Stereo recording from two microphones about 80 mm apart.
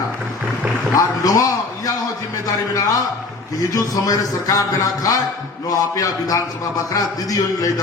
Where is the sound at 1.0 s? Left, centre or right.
Left.